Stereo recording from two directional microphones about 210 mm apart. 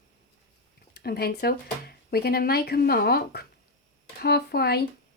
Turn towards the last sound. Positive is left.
turn(degrees=50)  # may be behind; listen again after turning